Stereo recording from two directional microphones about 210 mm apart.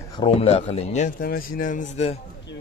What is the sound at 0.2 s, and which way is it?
Speech, 30° left (ahead or behind).